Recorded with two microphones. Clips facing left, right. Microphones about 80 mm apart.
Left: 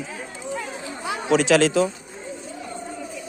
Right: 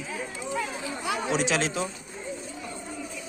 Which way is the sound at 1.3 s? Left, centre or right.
Left.